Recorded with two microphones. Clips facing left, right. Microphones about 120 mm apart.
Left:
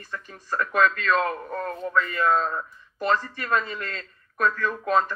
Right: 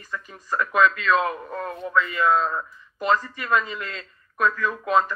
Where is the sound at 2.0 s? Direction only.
45° left (ahead or behind).